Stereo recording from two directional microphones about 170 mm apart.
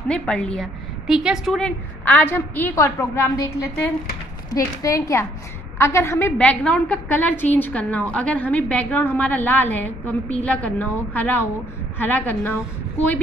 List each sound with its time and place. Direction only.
0.1 s a woman's voice: 5° left (ahead or behind)
2.0 s a woman's voice: 10° left (ahead or behind)